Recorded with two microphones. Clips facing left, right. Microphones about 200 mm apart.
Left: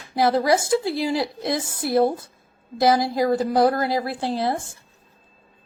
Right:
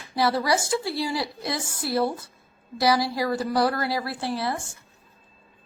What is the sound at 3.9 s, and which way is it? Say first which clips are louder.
Speech: left 4 dB; 20° left (ahead or behind).